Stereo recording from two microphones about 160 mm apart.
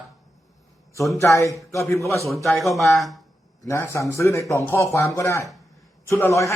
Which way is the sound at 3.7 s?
20° left (ahead or behind).